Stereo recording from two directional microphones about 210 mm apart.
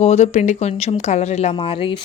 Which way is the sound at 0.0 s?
30° left (ahead or behind).